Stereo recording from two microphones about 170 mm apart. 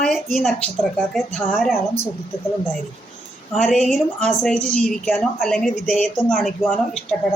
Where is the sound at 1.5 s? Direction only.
Centre (ahead or behind).